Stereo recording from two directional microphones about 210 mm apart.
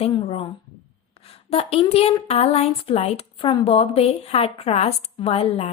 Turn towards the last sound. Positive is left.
turn(degrees=30)  # may be behind; listen again after turning